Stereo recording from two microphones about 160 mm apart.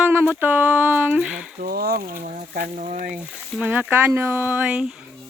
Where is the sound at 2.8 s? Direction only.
45° right (ahead or behind).